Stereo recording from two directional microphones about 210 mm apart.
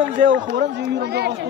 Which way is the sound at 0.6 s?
50° right (ahead or behind).